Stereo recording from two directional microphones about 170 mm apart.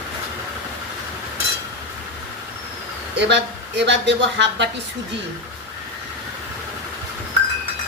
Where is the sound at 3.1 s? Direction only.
90° right.